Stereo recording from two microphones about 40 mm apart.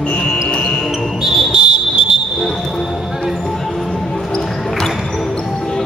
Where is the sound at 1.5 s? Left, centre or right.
Right.